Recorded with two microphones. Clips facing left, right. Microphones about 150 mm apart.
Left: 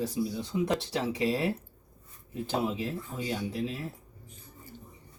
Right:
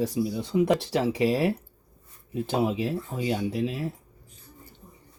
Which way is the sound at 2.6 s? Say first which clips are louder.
Right 6 dB; 75° right (ahead or behind).